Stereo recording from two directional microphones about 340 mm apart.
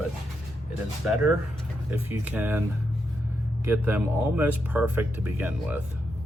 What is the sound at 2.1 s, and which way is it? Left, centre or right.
Speech, centre.